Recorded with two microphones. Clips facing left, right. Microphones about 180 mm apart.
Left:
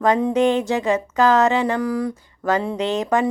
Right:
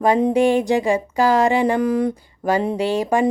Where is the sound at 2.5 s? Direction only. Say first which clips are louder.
Right 2 dB; 10° right (ahead or behind).